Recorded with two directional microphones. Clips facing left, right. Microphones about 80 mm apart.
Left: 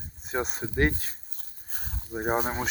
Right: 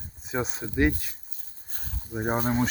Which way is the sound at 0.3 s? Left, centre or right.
Centre.